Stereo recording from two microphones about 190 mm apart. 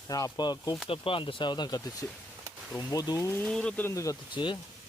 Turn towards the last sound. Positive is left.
turn(degrees=25)  # may be behind; listen again after turning